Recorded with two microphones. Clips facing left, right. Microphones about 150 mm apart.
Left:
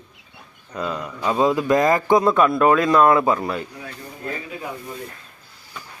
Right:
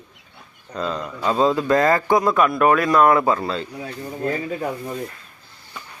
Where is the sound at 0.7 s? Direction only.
10° left (ahead or behind).